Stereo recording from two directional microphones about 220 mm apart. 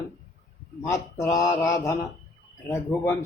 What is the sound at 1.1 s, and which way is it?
Speech, 10° left (ahead or behind).